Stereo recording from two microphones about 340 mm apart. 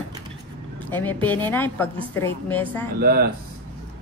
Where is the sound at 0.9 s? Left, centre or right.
Centre.